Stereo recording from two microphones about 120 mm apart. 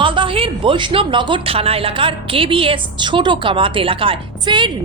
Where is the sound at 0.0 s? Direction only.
45° right (ahead or behind).